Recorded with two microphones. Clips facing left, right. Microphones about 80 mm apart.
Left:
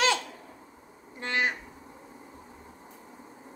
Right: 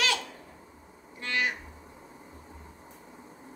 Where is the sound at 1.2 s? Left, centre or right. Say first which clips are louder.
Left 2 dB; left.